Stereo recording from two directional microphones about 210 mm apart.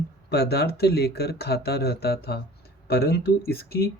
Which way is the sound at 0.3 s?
50° left (ahead or behind).